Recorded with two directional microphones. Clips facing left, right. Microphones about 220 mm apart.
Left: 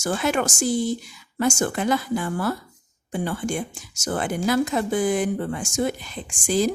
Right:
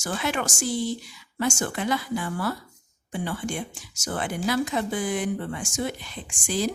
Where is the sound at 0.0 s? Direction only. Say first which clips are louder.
Left 5 dB; 45° left (ahead or behind).